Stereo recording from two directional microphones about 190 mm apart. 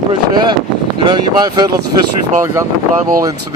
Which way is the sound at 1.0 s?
25° right (ahead or behind).